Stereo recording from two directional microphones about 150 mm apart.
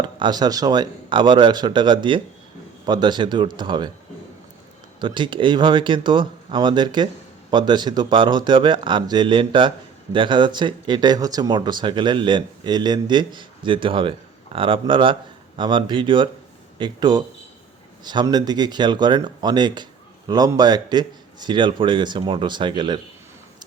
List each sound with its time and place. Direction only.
0.0 s a man's voice: 30° right (ahead or behind)
4.9 s a man's voice: 30° right (ahead or behind)